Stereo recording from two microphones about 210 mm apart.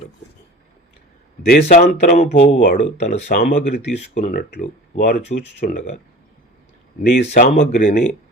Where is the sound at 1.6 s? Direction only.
35° left (ahead or behind); by 5.7 s 55° left (ahead or behind).